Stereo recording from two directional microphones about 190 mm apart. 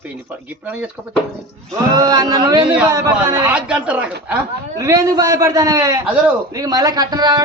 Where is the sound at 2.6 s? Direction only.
5° right (ahead or behind).